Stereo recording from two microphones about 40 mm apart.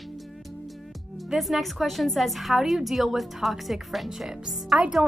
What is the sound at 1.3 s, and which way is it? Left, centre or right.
A woman's voice, centre.